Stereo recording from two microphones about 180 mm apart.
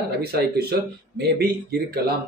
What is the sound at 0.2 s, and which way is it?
Speech, 60° right (ahead or behind).